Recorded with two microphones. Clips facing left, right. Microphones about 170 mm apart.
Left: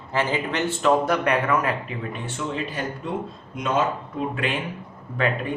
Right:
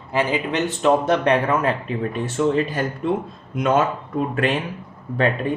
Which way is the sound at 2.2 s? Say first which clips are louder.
Right 11 dB; 45° right (ahead or behind).